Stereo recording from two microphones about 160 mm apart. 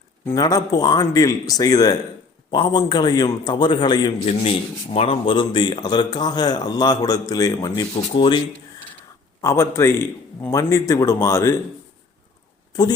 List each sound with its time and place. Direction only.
0.3 s speech: 25° left (ahead or behind)
9.4 s a man's voice: 20° left (ahead or behind)